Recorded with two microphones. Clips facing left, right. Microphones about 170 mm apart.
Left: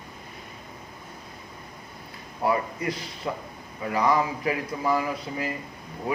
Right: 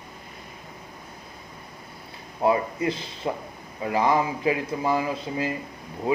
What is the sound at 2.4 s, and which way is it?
A man's voice, 25° right (ahead or behind).